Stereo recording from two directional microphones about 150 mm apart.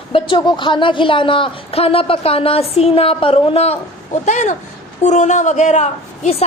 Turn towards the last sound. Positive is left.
turn(degrees=45)  # may be behind; listen again after turning